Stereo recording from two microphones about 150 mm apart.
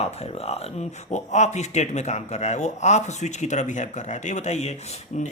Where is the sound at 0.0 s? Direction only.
45° left (ahead or behind).